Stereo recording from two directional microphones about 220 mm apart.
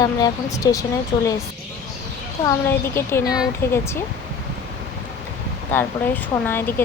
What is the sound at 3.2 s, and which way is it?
Speech, centre (ahead or behind).